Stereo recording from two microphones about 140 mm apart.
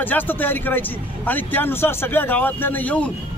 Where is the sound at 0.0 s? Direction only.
15° left (ahead or behind).